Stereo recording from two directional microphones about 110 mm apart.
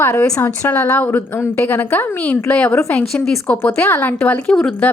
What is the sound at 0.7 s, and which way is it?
A woman's voice, 15° left (ahead or behind).